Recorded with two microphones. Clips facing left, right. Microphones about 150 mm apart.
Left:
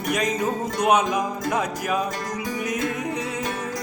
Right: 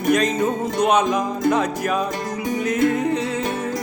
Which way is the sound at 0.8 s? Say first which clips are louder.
Right 2 dB; 10° left (ahead or behind).